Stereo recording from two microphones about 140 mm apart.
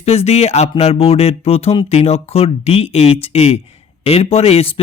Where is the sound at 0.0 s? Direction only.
50° left (ahead or behind).